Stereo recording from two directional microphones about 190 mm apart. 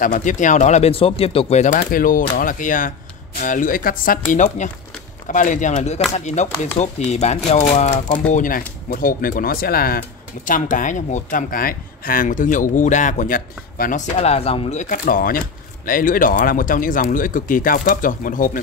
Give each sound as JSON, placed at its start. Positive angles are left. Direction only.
{"t": 0.0, "sound": "speech", "side_deg": 45}
{"t": 1.8, "sound": "speech", "side_deg": 50}